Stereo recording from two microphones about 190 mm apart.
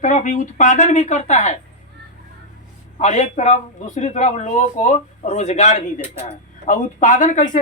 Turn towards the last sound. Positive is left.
turn(degrees=40)  # may be behind; listen again after turning